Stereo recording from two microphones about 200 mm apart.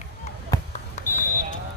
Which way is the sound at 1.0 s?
35° left (ahead or behind).